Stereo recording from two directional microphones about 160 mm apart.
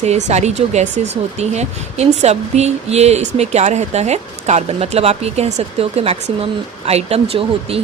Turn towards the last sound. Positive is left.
turn(degrees=-35)  # may be behind; listen again after turning